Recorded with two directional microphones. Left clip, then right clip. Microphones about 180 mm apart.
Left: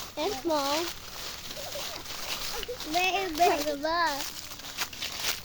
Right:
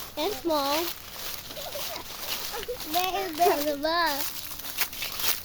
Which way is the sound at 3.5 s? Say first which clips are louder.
Right 2 dB; 30° right (ahead or behind).